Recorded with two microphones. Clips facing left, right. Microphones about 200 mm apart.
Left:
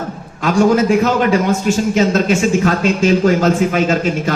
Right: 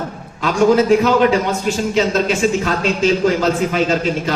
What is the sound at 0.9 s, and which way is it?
Speech, 45° left (ahead or behind).